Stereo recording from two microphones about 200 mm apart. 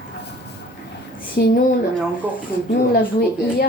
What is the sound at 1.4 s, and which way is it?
Speech, 55° left (ahead or behind).